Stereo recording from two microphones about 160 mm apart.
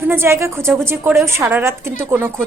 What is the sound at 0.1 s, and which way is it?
A woman's voice, 15° right (ahead or behind).